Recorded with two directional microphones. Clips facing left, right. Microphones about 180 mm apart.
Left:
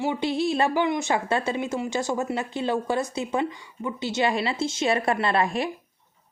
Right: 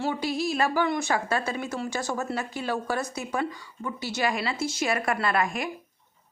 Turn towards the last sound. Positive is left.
turn(degrees=30)  # may be behind; listen again after turning